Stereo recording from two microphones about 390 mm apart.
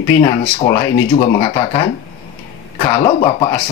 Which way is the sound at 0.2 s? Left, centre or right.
Centre.